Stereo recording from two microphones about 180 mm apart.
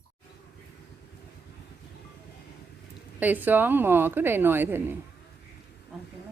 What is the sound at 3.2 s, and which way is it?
A woman's voice, 10° right (ahead or behind).